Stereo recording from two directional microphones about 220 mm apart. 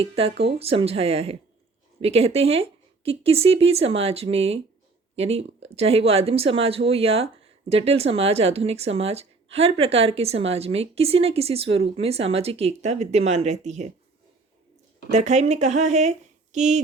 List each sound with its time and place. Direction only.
0.0 s speech: 25° right (ahead or behind)
15.1 s speech: 30° right (ahead or behind)